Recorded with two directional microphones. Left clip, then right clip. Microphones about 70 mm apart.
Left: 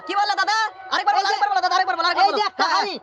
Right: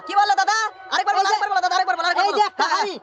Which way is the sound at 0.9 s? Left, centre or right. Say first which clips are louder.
Right 1 dB; right.